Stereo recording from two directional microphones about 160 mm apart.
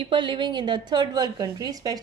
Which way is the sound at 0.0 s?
30° right (ahead or behind).